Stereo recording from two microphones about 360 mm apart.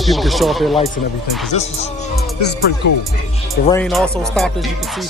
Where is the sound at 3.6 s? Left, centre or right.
Centre.